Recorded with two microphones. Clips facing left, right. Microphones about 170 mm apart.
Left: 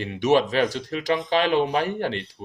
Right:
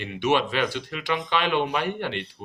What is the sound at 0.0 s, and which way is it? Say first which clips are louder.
Speech: left 4 dB; 40° left (ahead or behind).